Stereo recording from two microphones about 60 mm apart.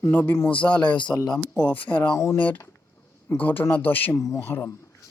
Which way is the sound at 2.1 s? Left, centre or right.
Left.